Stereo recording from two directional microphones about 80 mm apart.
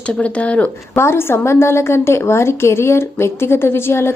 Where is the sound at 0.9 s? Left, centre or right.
Left.